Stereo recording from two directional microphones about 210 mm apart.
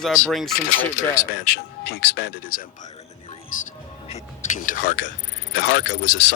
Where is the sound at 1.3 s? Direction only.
55° left (ahead or behind).